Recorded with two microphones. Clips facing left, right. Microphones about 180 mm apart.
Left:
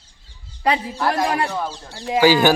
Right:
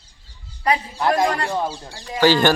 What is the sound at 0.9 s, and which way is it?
Speech, 15° right (ahead or behind).